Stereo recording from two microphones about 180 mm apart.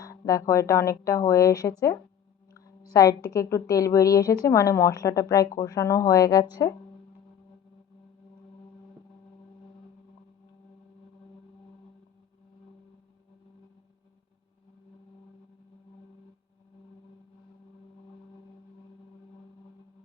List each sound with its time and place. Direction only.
0.0 s a woman's voice: 20° left (ahead or behind)